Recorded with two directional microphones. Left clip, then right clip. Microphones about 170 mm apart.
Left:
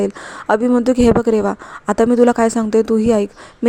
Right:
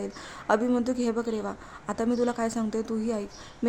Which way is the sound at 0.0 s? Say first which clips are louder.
Left 14 dB; 40° left (ahead or behind).